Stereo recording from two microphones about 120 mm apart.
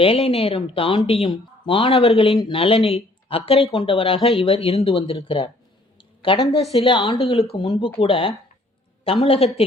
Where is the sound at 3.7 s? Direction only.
45° left (ahead or behind).